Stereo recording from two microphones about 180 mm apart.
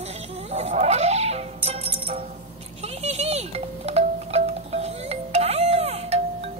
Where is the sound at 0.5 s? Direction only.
40° right (ahead or behind).